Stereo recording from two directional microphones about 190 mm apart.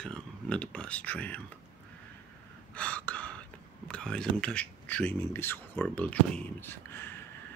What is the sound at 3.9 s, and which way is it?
Speech, 5° left (ahead or behind).